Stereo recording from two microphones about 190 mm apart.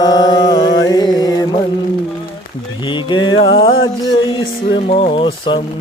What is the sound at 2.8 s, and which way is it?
Mantra, 25° left (ahead or behind).